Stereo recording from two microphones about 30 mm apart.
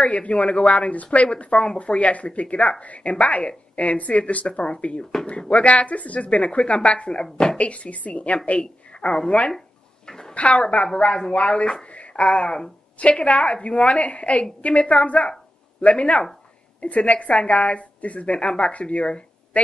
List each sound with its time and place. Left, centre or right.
0.0 s speech: left
7.5 s speech: left
10.0 s a sound: left
10.3 s speech: left